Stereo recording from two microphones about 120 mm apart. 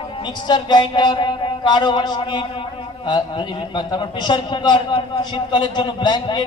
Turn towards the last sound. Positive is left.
turn(degrees=40)  # may be behind; listen again after turning